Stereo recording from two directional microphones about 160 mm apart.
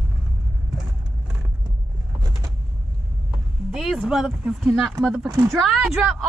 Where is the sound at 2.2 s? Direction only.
25° right (ahead or behind).